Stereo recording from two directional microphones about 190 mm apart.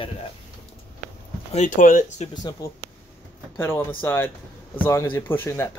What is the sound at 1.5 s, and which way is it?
Speech, 40° left (ahead or behind).